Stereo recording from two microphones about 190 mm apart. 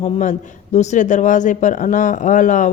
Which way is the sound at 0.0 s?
40° left (ahead or behind).